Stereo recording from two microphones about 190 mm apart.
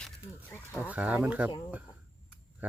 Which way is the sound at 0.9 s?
10° right (ahead or behind).